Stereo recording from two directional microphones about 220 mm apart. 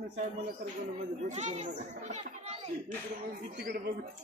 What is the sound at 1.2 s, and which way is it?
A child's voice, 30° right (ahead or behind).